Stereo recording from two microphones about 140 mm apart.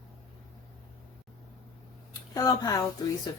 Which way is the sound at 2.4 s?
25° left (ahead or behind).